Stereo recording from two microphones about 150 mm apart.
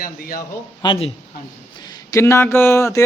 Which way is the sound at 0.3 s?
30° left (ahead or behind).